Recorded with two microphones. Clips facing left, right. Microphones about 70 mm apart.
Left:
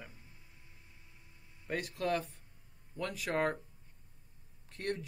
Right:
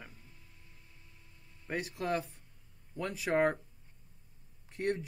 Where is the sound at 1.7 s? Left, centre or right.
Centre.